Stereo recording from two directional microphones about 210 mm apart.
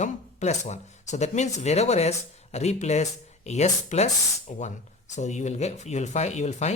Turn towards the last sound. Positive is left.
turn(degrees=35)  # may be behind; listen again after turning